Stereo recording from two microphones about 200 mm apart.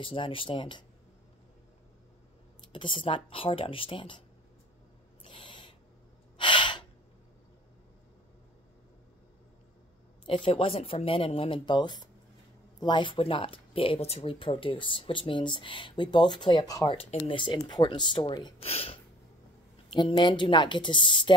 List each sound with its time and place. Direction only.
0.0 s speech: 25° left (ahead or behind)
2.7 s speech: 25° left (ahead or behind)
5.2 s owl: 25° left (ahead or behind)
6.3 s gasp: 25° left (ahead or behind)
10.2 s speech: 25° left (ahead or behind)